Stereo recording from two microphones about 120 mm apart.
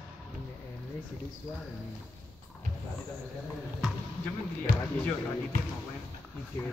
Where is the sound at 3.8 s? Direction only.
5° right (ahead or behind).